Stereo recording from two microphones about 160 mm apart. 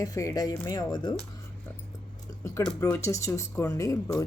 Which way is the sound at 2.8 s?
20° left (ahead or behind).